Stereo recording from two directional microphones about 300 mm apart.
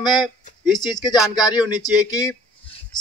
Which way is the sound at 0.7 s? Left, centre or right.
Centre.